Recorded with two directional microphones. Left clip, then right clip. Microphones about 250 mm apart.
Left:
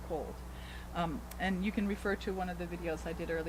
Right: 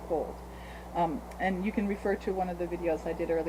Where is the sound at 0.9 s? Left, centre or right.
Centre.